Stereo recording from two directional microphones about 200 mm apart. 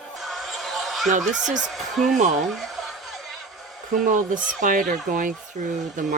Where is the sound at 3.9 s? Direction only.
40° right (ahead or behind).